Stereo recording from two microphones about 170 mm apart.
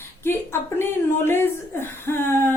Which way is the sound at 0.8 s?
15° left (ahead or behind).